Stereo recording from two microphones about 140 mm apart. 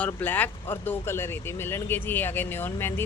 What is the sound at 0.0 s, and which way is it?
Speech, 10° left (ahead or behind).